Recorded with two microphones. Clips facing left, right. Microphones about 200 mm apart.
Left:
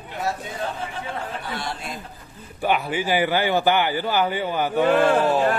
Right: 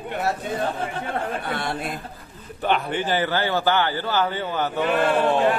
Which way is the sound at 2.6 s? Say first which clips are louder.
Even; 10° left (ahead or behind).